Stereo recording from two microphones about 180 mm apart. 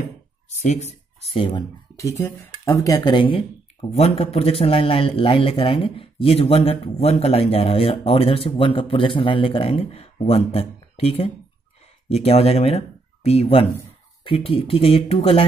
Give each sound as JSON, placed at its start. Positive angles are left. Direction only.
{"t": 0.7, "sound": "speech", "side_deg": 35}
{"t": 2.0, "sound": "speech", "side_deg": 15}